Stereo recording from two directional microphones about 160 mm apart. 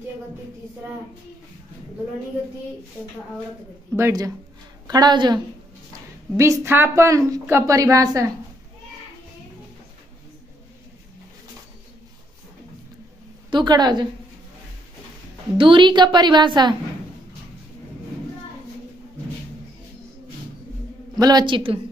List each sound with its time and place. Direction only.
3.9 s a woman's voice: 20° right (ahead or behind)
13.5 s a woman's voice: 25° right (ahead or behind)
15.5 s a woman's voice: 30° right (ahead or behind)
21.2 s a woman's voice: 25° right (ahead or behind)